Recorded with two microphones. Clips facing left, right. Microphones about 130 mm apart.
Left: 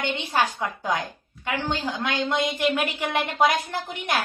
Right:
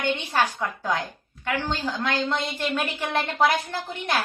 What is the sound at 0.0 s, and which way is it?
A woman's voice, 15° left (ahead or behind).